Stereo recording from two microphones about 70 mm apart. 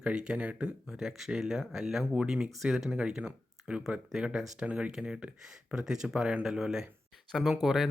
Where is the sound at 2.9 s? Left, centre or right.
Centre.